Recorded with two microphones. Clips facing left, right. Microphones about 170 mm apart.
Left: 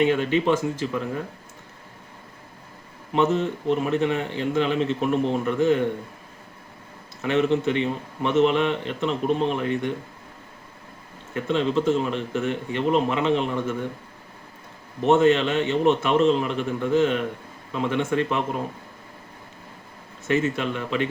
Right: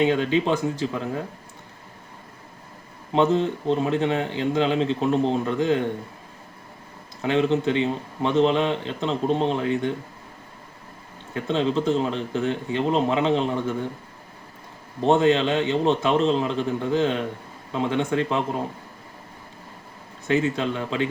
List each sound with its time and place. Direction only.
0.0 s speech: 15° right (ahead or behind)
3.2 s a man's voice: 15° right (ahead or behind)
7.2 s a man's voice: 15° right (ahead or behind)
11.3 s a man's voice: 20° right (ahead or behind)
15.1 s a man's voice: 15° right (ahead or behind)
20.3 s a man's voice: 20° right (ahead or behind)